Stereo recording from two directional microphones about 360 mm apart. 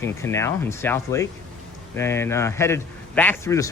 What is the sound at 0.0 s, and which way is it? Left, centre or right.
A man's voice, centre.